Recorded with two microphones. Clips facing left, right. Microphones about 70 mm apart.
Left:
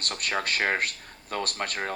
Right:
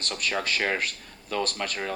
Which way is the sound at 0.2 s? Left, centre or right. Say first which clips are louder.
Even; left.